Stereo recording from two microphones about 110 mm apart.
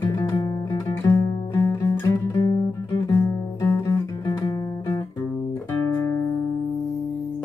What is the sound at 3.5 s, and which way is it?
Music, 30° left (ahead or behind).